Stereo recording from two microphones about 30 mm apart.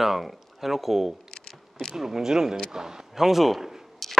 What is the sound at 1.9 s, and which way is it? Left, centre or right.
Speech, centre.